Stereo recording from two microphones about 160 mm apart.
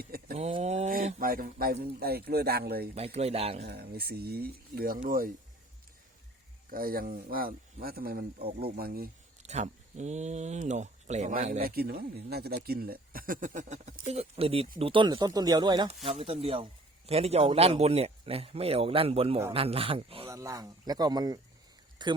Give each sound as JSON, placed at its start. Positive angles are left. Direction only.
{"t": 0.0, "sound": "a sound", "side_deg": -70}
{"t": 0.3, "sound": "a sound", "side_deg": -40}
{"t": 1.2, "sound": "speech", "side_deg": -65}
{"t": 2.9, "sound": "a man's voice", "side_deg": -40}
{"t": 3.6, "sound": "speech", "side_deg": -80}
{"t": 5.0, "sound": "speech", "side_deg": -60}
{"t": 6.7, "sound": "speech", "side_deg": -65}
{"t": 9.4, "sound": "speech", "side_deg": -45}
{"t": 11.6, "sound": "speech", "side_deg": -75}
{"t": 16.0, "sound": "a man's voice", "side_deg": -40}
{"t": 20.2, "sound": "speech", "side_deg": -20}